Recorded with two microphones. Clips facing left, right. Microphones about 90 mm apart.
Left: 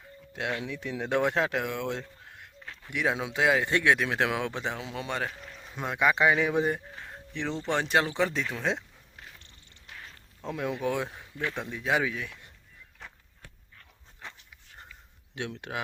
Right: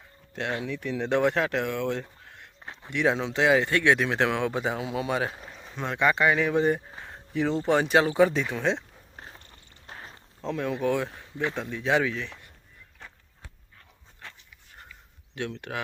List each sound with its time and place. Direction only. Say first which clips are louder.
0.6 s speech: right 4 dB; 15° left (ahead or behind)
2.6 s a sound: right 4 dB; 25° right (ahead or behind)
2.9 s a man's voice: right 4 dB; 5° left (ahead or behind)
5.3 s speech: right 2 dB; 30° right (ahead or behind)
5.5 s speech: right 1 dB; 5° left (ahead or behind)
7.1 s a sound: right 7 dB; 5° right (ahead or behind)
7.7 s speech: right 4 dB; 5° right (ahead or behind)
9.1 s cat: right 4 dB; 35° right (ahead or behind)
9.8 s cricket: right 3 dB; 35° right (ahead or behind)
10.4 s speech: right 3 dB; 10° left (ahead or behind)
15.3 s speech: right 3 dB; 20° left (ahead or behind)